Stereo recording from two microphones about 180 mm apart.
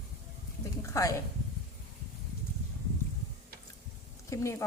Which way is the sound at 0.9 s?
15° left (ahead or behind).